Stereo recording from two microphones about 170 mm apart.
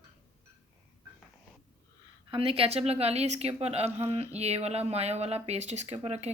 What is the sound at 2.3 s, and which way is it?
A woman's voice, 35° right (ahead or behind).